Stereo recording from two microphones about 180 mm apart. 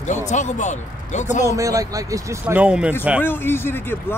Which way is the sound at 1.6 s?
20° right (ahead or behind).